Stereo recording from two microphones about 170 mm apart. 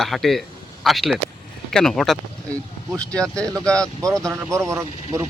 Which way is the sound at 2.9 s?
20° right (ahead or behind).